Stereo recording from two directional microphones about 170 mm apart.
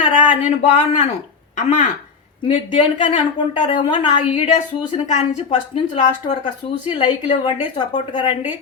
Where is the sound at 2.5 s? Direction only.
30° left (ahead or behind).